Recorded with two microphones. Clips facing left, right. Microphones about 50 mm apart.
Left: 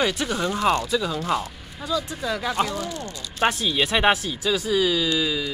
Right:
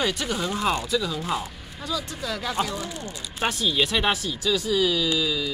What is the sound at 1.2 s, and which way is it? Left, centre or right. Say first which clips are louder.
Speech: left 3 dB; centre.